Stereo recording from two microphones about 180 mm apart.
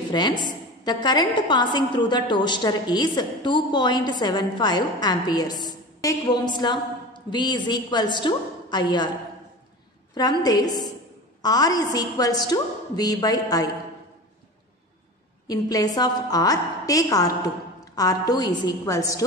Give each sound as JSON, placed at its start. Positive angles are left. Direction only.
{"t": 0.1, "sound": "a woman's voice", "side_deg": 25}
{"t": 10.1, "sound": "a woman's voice", "side_deg": 20}
{"t": 15.4, "sound": "a woman's voice", "side_deg": 20}